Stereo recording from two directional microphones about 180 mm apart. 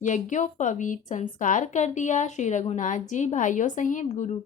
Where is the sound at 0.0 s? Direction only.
45° left (ahead or behind).